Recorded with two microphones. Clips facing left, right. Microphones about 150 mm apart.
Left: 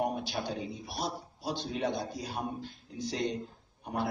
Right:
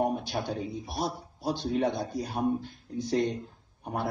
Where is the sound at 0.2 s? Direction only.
50° right (ahead or behind).